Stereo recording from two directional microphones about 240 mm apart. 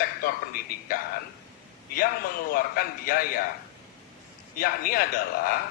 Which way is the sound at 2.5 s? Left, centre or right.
Left.